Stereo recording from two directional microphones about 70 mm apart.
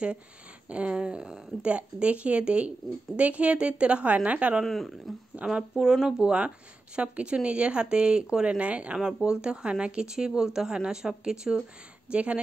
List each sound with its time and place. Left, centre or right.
0.7 s a woman's voice: centre
4.6 s speech: centre
5.3 s a woman's voice: centre